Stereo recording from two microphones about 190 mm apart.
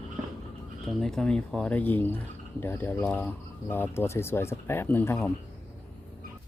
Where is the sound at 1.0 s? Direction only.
5° left (ahead or behind).